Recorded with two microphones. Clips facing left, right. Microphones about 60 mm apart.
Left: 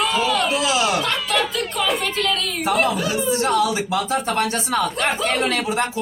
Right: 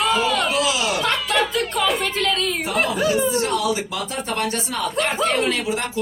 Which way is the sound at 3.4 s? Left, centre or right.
Left.